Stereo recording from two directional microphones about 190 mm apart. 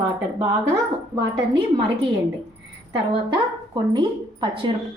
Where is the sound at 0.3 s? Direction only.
15° right (ahead or behind).